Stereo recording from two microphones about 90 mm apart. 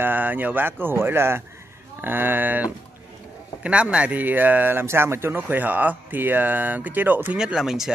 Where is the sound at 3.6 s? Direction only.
15° right (ahead or behind).